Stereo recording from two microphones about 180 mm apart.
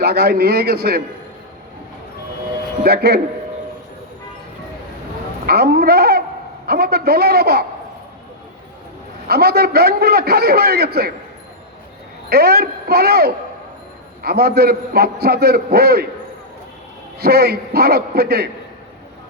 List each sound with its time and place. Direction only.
0.0 s a man's voice: 60° right (ahead or behind)
2.8 s a man's voice: 60° right (ahead or behind)
5.5 s a man's voice: 60° right (ahead or behind)
9.2 s a man's voice: 60° right (ahead or behind)
12.3 s a man's voice: 60° right (ahead or behind)
17.2 s a man's voice: 60° right (ahead or behind)